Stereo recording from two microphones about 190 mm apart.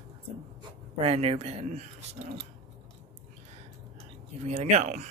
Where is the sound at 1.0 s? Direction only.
35° right (ahead or behind).